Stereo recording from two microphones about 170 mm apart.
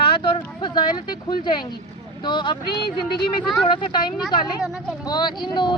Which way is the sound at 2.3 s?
25° left (ahead or behind).